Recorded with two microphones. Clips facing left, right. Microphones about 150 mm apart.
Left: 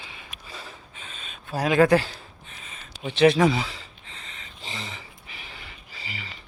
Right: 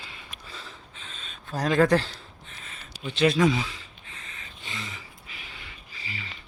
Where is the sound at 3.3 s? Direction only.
30° left (ahead or behind).